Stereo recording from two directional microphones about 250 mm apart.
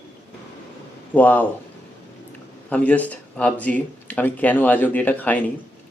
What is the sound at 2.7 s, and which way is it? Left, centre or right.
Speech, centre.